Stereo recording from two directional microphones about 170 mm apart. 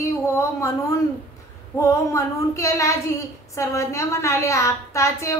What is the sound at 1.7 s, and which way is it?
A woman's voice, 15° left (ahead or behind).